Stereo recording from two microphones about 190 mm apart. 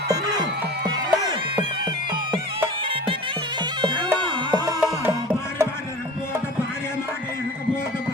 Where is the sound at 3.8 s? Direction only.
25° right (ahead or behind).